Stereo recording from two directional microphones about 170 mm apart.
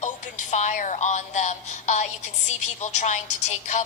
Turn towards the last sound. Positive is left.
turn(degrees=45)  # may be behind; listen again after turning